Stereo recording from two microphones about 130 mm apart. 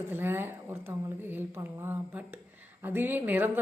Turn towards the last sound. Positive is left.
turn(degrees=-15)  # may be behind; listen again after turning